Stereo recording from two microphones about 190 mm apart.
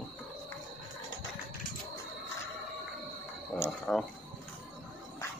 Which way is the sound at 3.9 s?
5° left (ahead or behind).